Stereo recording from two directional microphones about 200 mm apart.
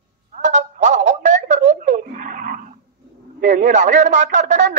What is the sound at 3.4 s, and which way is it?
A man's voice, 40° right (ahead or behind).